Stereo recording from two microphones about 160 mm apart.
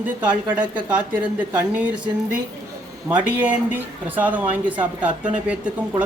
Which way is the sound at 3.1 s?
10° right (ahead or behind).